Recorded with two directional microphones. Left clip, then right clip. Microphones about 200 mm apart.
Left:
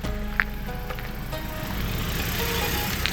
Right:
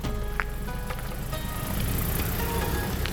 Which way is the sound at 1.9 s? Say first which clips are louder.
Left 3 dB; 40° right (ahead or behind).